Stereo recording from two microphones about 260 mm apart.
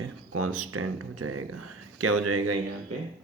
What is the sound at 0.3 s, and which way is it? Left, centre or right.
Speech, right.